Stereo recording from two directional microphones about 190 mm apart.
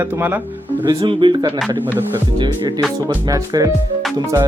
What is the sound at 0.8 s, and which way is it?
Speech, 25° right (ahead or behind).